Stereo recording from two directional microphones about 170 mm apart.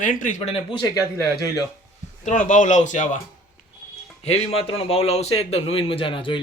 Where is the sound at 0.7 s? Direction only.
20° left (ahead or behind).